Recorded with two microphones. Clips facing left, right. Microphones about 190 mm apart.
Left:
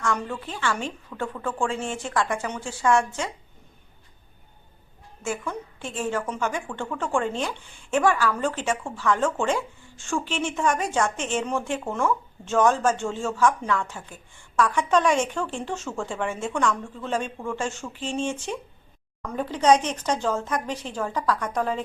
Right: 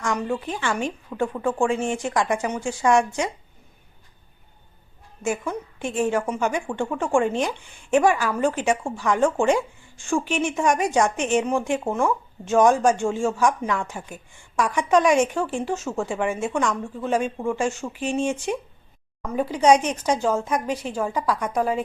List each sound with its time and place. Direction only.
0.0 s speech: 15° right (ahead or behind)
5.2 s speech: 15° right (ahead or behind)